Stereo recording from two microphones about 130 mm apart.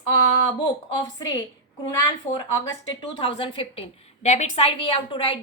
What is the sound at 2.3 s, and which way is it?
Speech, 60° left (ahead or behind).